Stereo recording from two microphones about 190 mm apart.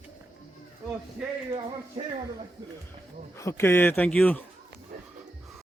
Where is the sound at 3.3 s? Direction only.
15° left (ahead or behind).